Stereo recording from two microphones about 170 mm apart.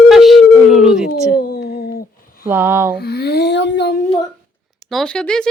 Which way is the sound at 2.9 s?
70° left (ahead or behind).